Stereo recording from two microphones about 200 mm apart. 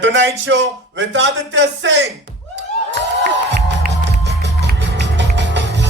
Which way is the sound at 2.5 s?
60° right (ahead or behind).